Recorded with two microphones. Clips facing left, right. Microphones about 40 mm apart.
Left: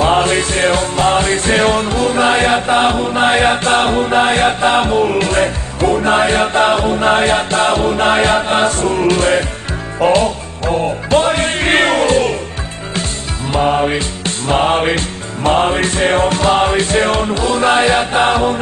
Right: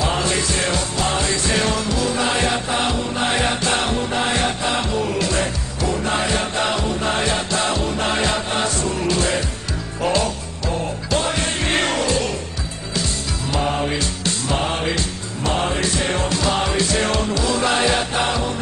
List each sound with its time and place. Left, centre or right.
0.0 s music: left
13.5 s music: left